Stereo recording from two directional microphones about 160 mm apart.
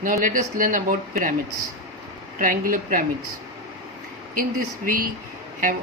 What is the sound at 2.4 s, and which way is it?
Speech, 60° right (ahead or behind).